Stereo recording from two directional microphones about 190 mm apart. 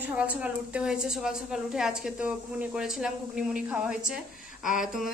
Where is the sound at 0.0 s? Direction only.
5° right (ahead or behind).